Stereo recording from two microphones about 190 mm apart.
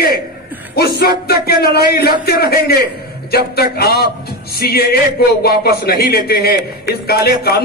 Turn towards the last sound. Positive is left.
turn(degrees=55)  # may be behind; listen again after turning